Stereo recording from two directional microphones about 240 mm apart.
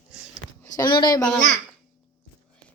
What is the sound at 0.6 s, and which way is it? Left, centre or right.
Speech, centre.